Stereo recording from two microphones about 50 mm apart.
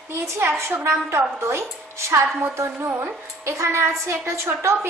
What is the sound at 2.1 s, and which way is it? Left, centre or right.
A woman's voice, right.